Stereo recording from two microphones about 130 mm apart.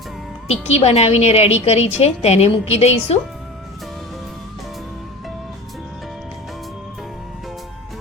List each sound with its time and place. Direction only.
0.4 s a woman's voice: 55° left (ahead or behind)